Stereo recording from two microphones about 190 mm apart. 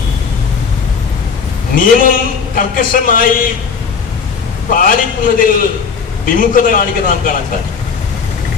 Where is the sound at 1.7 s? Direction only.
50° left (ahead or behind).